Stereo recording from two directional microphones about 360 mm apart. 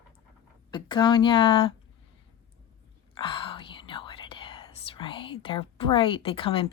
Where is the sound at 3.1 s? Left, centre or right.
Centre.